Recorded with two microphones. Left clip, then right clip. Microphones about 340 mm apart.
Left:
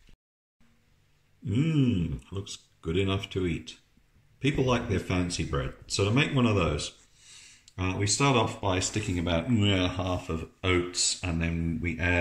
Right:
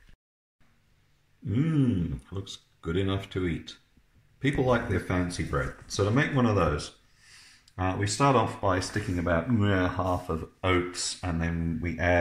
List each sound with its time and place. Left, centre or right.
1.4 s speech: centre